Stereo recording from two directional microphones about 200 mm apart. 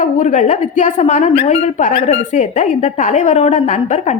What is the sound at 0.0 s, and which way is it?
A woman's voice, 35° left (ahead or behind).